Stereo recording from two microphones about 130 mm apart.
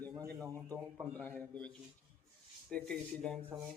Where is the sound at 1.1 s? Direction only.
15° left (ahead or behind).